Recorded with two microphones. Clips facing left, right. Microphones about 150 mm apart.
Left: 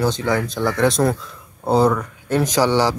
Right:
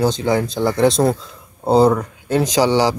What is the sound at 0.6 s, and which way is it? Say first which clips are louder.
A man's voice: right 2 dB; 20° right (ahead or behind).